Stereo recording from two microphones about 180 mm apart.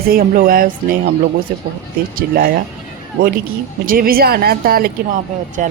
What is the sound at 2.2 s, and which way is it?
Speech, 55° right (ahead or behind).